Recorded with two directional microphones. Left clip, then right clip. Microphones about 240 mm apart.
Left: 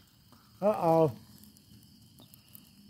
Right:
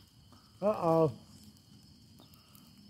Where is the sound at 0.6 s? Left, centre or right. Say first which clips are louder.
Left 3 dB; left.